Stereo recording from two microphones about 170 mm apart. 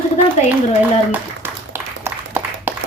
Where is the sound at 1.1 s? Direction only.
15° right (ahead or behind).